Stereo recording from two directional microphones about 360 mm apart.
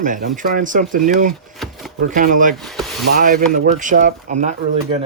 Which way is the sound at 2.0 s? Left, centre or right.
Right.